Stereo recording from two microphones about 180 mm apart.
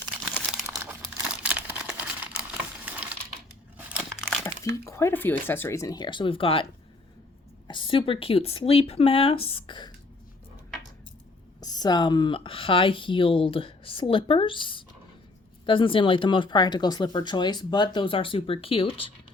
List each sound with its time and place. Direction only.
1.1 s crumpling: 10° right (ahead or behind)
2.8 s typewriter: 10° right (ahead or behind)
3.8 s crumpling: 5° right (ahead or behind)
4.7 s speech: 15° left (ahead or behind)
7.7 s speech: 30° left (ahead or behind)
11.6 s speech: 20° left (ahead or behind)